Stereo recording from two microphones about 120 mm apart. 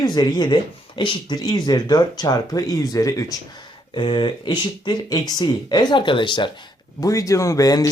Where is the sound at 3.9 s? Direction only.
40° left (ahead or behind).